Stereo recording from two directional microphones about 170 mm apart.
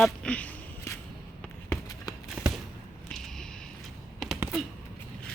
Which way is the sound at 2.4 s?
5° right (ahead or behind).